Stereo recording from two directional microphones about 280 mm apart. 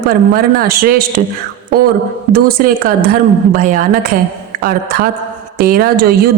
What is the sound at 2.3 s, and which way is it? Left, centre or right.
A woman's voice, right.